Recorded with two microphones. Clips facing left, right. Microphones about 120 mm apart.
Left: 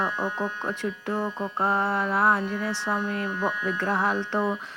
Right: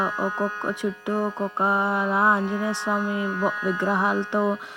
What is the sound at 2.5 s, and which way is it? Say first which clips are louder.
Speech: right 3 dB; 20° right (ahead or behind).